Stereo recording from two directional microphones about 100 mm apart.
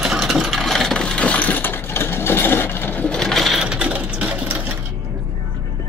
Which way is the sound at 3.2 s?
5° left (ahead or behind).